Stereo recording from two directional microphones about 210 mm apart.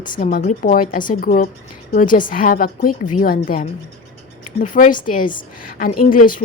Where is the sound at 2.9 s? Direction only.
90° left.